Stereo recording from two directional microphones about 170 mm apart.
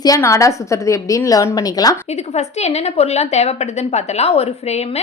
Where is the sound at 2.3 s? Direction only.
40° left (ahead or behind).